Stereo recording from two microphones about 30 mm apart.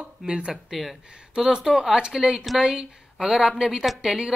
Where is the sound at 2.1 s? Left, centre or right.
Centre.